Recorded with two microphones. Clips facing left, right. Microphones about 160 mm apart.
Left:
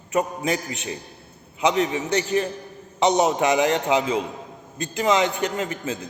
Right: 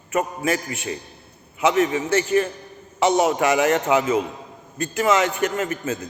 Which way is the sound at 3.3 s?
20° left (ahead or behind).